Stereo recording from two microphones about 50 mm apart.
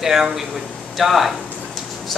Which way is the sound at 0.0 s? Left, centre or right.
Centre.